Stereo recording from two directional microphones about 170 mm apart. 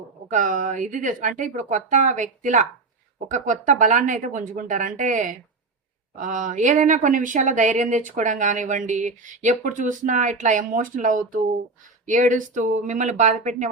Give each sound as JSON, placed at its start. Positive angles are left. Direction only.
{"t": 0.3, "sound": "speech", "side_deg": -50}